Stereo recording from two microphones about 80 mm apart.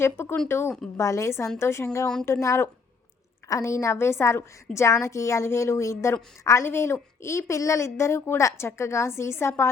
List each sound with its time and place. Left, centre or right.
0.0 s a woman's voice: left